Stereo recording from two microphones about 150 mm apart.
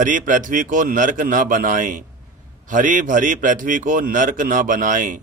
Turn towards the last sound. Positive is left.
turn(degrees=-60)  # may be behind; listen again after turning